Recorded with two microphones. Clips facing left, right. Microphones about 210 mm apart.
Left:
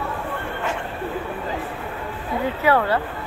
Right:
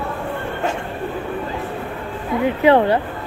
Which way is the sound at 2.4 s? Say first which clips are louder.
Right 6 dB; 20° right (ahead or behind).